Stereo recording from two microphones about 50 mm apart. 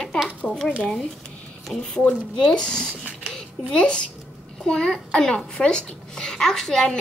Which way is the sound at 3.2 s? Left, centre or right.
Centre.